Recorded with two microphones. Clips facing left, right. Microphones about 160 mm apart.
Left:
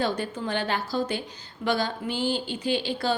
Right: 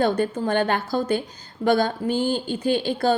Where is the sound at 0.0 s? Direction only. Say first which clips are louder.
Right 6 dB; 50° right (ahead or behind).